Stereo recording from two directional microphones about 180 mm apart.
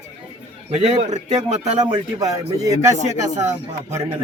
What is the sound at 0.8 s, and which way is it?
Speech, 40° right (ahead or behind).